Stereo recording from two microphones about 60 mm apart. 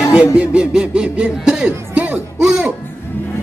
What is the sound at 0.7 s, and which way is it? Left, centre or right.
Speech, centre.